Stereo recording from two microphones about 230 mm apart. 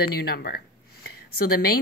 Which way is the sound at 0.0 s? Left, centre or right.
Left.